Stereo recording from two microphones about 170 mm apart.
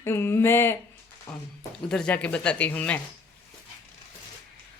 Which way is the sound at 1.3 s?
15° left (ahead or behind).